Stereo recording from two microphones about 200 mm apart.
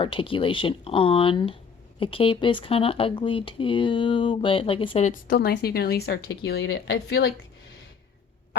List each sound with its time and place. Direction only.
0.0 s speech: 25° left (ahead or behind); by 7.3 s 55° left (ahead or behind)